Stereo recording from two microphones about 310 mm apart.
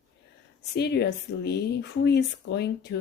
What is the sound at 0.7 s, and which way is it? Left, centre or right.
Speech, left.